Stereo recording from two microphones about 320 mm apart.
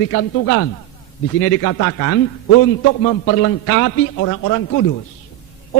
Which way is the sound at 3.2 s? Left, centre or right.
Left.